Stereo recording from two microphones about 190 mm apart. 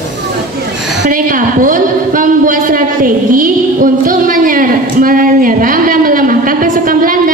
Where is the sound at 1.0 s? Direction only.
45° right (ahead or behind).